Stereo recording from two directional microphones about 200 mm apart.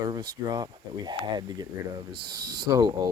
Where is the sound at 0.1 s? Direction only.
20° right (ahead or behind).